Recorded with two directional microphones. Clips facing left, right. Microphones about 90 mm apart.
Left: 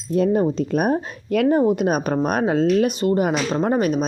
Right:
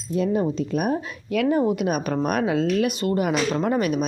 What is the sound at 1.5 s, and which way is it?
Speech, 30° left (ahead or behind).